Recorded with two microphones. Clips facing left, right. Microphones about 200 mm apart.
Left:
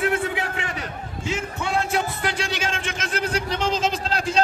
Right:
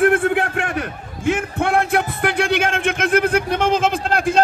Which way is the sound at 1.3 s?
55° right (ahead or behind).